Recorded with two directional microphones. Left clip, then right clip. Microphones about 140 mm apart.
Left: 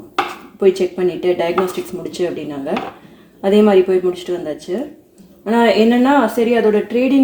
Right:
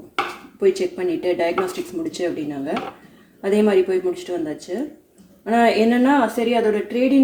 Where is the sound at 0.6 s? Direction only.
35° left (ahead or behind).